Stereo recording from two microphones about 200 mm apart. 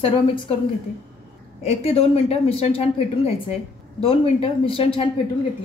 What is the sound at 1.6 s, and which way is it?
A woman's voice, 30° left (ahead or behind).